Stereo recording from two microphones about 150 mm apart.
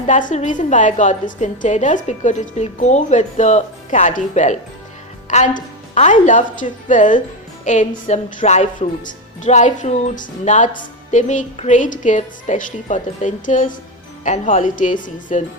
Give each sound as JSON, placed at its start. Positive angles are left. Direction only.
{"t": 0.1, "sound": "a woman's voice", "side_deg": 60}